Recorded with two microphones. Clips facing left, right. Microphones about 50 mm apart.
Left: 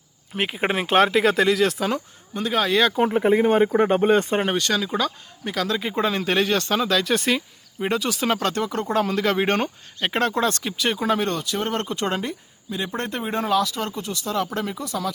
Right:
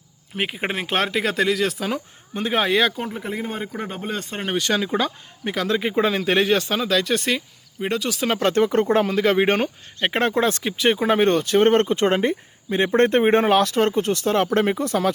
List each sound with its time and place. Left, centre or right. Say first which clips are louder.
0.3 s speech: left 2 dB; centre
2.3 s speech: right 1 dB; right
3.1 s speech: left 10 dB; left
4.7 s speech: right 1 dB; right
6.0 s speech: right 1 dB; centre
8.4 s speech: right 6 dB; right
9.0 s speech: right 3 dB; centre
10.0 s speech: right 2 dB; right
11.9 s speech: right 6 dB; right